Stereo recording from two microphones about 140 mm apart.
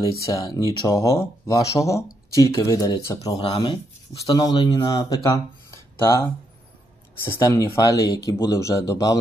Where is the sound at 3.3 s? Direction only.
40° left (ahead or behind).